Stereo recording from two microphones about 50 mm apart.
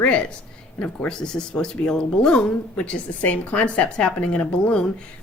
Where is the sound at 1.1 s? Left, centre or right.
Centre.